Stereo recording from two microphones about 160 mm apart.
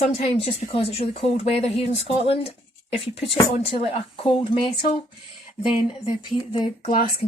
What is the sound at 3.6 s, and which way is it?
Speech, 35° left (ahead or behind).